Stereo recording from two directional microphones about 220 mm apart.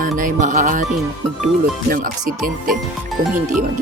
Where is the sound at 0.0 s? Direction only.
35° right (ahead or behind).